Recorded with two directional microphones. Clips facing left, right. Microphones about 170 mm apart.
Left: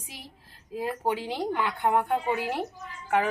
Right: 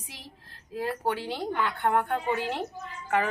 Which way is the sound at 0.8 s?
15° left (ahead or behind).